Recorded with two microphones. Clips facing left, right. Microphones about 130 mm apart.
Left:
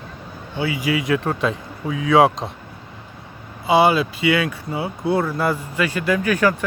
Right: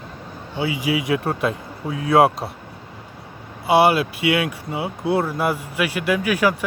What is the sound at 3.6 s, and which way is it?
Speech, 10° right (ahead or behind).